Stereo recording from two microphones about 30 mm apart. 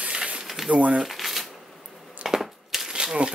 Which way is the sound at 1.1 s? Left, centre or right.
Centre.